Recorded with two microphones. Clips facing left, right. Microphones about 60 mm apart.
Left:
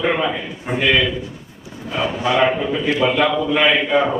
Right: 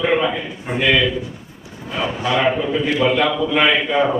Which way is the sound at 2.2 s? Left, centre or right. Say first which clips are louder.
Left 2 dB; centre.